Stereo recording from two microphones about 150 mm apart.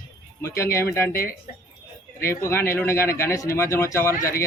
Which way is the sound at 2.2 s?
20° left (ahead or behind).